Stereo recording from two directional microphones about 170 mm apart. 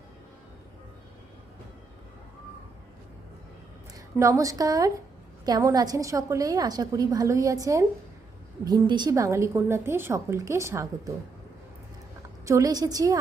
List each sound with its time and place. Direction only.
3.9 s a woman's voice: 20° right (ahead or behind)
12.5 s a woman's voice: 20° right (ahead or behind)